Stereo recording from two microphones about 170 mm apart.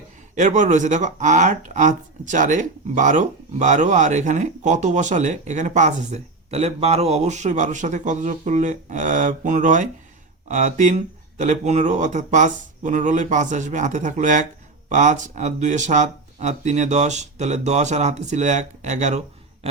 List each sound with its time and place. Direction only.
0.3 s speech: 45° right (ahead or behind)